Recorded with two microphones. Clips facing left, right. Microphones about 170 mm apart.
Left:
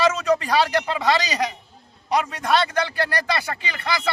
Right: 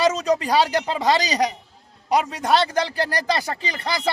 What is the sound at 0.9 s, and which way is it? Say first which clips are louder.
Speech: right 1 dB; 35° right (ahead or behind).